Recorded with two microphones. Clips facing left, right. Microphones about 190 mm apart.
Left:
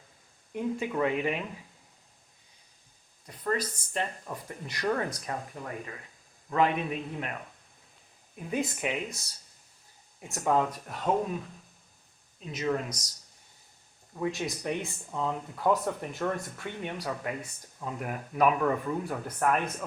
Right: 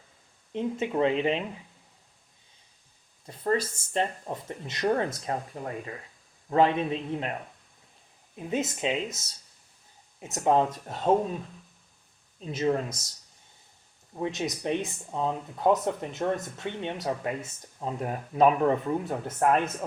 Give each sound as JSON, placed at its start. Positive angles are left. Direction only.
{"t": 0.5, "sound": "speech", "side_deg": -25}
{"t": 3.2, "sound": "speech", "side_deg": -30}
{"t": 8.4, "sound": "speech", "side_deg": -20}
{"t": 12.4, "sound": "speech", "side_deg": -30}
{"t": 14.2, "sound": "speech", "side_deg": -20}